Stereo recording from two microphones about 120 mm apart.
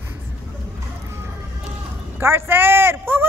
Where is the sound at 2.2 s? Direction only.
20° right (ahead or behind).